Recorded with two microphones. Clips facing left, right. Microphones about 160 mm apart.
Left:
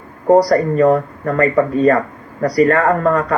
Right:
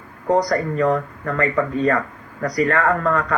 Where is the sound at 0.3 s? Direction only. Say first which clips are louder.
Left 6 dB; 35° left (ahead or behind).